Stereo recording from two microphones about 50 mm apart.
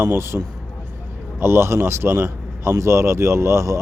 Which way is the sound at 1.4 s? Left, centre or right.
Right.